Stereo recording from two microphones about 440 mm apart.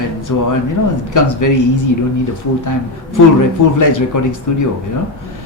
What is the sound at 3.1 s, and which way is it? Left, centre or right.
Speech, left.